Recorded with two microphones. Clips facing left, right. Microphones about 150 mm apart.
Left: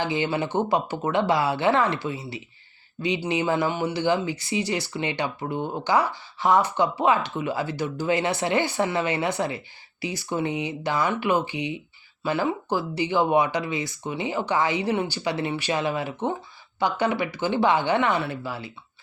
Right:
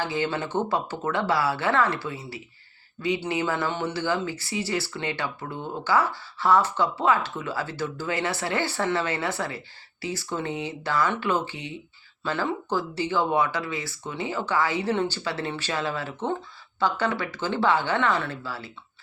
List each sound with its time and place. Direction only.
0.0 s speech: 20° left (ahead or behind)